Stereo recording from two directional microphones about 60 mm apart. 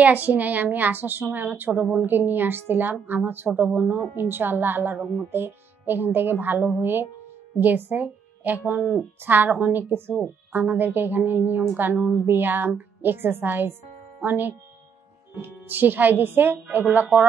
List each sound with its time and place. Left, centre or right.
0.0 s a woman's voice: right
4.2 s a woman's voice: right
12.0 s a woman's voice: centre
12.3 s a woman's voice: right
16.8 s speech: right